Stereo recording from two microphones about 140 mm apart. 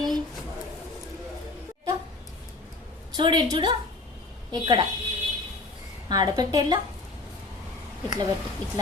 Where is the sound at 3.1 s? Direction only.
35° right (ahead or behind).